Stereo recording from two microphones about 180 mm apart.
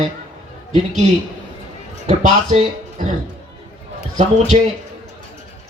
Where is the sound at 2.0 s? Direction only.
35° right (ahead or behind).